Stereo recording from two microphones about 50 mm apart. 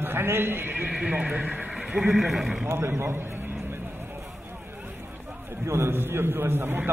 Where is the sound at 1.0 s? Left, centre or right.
Right.